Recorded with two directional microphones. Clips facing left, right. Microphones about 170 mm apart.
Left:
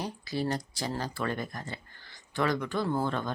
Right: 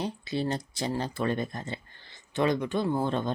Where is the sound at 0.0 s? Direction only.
25° right (ahead or behind).